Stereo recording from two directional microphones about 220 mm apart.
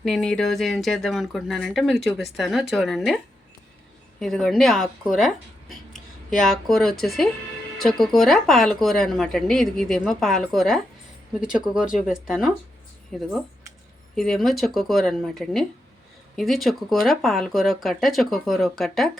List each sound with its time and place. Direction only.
0.0 s speech: 5° left (ahead or behind)
4.2 s speech: centre (ahead or behind)